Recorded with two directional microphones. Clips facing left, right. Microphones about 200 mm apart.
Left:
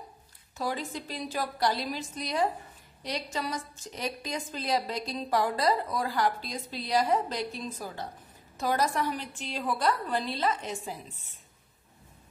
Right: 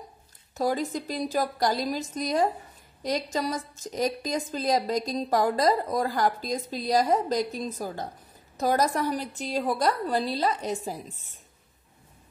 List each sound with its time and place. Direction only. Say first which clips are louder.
0.6 s a woman's voice: right 6 dB; 40° right (ahead or behind)